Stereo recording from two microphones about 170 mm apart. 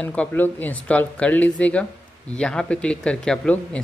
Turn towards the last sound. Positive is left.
turn(degrees=5)  # may be behind; listen again after turning